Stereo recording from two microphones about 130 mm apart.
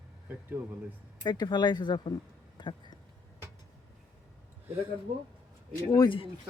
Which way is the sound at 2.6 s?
35° left (ahead or behind).